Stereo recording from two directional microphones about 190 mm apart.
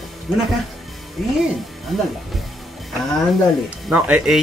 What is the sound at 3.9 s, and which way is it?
Speech, 5° right (ahead or behind).